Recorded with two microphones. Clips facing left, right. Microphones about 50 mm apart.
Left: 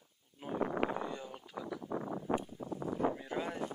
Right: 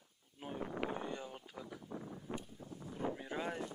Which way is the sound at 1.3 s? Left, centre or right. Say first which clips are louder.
Left 6 dB; left.